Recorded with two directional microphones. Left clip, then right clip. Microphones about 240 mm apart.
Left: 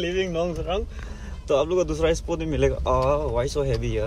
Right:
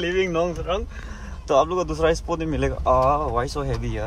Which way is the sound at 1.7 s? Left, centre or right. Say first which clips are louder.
Right 1 dB; centre.